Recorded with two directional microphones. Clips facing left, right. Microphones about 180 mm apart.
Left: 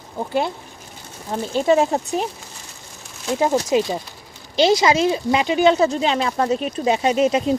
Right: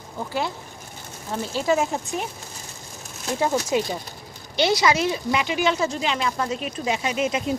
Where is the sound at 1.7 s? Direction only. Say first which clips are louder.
Left 6 dB; 35° left (ahead or behind).